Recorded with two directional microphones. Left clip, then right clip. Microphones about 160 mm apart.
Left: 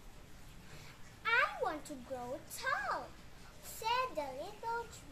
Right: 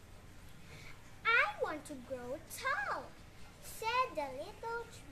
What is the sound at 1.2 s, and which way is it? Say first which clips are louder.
Children playing: right 1 dB; 20° right (ahead or behind).